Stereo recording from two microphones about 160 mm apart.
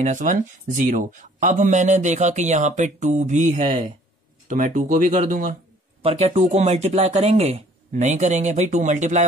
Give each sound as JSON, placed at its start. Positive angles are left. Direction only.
{"t": 0.0, "sound": "speech", "side_deg": -50}
{"t": 6.0, "sound": "speech", "side_deg": -40}